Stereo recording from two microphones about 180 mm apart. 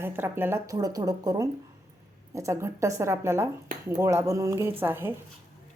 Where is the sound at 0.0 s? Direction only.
10° right (ahead or behind).